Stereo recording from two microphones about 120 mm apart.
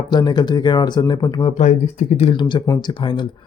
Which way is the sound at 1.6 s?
75° left (ahead or behind).